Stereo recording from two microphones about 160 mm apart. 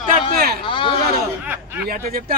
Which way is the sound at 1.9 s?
65° right (ahead or behind).